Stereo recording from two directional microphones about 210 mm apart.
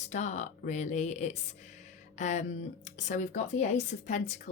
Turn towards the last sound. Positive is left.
turn(degrees=35)  # may be behind; listen again after turning